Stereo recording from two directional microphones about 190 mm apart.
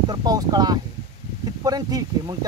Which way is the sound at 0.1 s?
20° right (ahead or behind).